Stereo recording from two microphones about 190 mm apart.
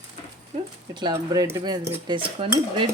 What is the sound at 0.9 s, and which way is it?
Cutlery, 20° right (ahead or behind).